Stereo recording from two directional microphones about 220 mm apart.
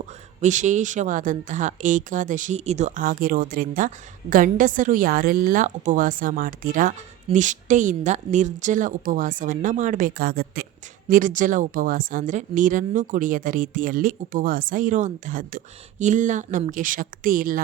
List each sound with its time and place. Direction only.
0.0 s speech: 35° right (ahead or behind)